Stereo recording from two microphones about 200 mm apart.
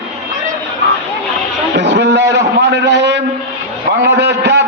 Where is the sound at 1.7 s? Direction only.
60° right (ahead or behind).